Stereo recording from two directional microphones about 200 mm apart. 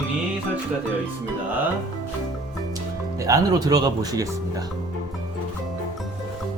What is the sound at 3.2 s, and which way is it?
Speech, 15° right (ahead or behind).